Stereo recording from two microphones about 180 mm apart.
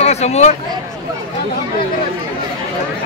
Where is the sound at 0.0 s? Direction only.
35° left (ahead or behind).